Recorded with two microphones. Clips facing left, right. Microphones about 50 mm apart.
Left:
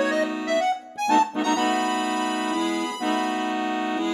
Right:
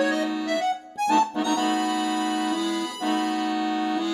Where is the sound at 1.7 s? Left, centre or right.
Left.